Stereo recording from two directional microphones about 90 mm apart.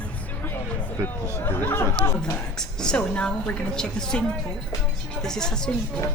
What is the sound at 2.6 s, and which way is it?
A woman's voice, 10° left (ahead or behind).